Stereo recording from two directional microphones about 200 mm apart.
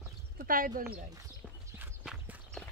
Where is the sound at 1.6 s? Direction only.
10° right (ahead or behind).